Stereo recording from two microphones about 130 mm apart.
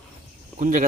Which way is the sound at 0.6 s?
85° right.